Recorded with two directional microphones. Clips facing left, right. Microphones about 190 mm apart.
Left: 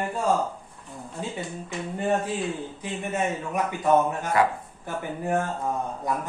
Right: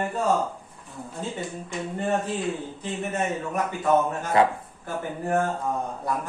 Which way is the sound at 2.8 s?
10° left (ahead or behind).